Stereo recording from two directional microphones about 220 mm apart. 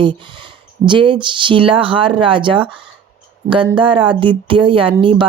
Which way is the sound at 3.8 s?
25° right (ahead or behind).